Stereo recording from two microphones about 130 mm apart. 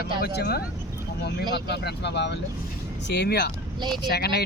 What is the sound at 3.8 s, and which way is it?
Speech, 35° right (ahead or behind).